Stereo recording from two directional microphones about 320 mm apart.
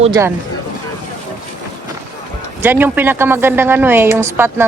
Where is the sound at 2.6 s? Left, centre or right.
Centre.